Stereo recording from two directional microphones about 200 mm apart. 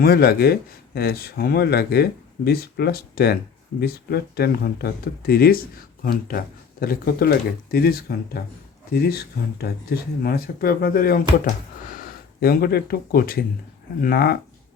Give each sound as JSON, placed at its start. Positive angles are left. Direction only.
{"t": 0.0, "sound": "speech", "side_deg": 50}